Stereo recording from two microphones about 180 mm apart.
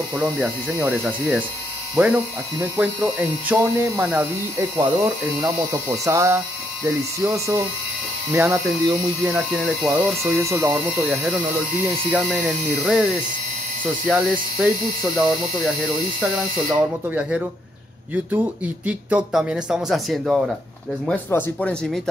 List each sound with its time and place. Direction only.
0.1 s speech: 5° right (ahead or behind)
3.6 s speech: 15° right (ahead or behind)
9.3 s speech: centre (ahead or behind)
10.3 s speech: 15° right (ahead or behind)
18.9 s speech: 5° right (ahead or behind)